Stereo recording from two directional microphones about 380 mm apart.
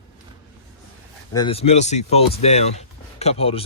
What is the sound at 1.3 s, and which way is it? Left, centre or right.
Speech, centre.